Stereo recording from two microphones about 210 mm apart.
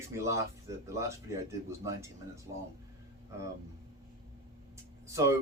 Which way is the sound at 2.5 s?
25° right (ahead or behind).